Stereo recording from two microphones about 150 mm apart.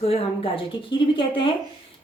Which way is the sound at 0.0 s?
40° left (ahead or behind).